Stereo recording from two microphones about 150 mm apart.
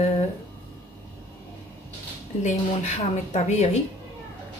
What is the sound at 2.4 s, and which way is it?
A woman's voice, 50° left (ahead or behind).